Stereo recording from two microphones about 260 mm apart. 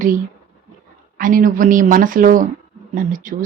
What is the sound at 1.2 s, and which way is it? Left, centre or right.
Speech, right.